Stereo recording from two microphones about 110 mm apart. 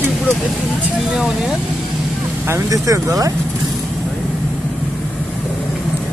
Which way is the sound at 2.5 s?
30° right (ahead or behind).